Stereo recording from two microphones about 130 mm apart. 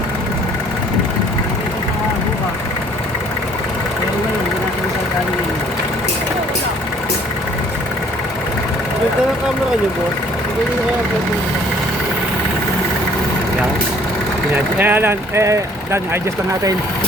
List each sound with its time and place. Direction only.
14.5 s speech: 15° right (ahead or behind)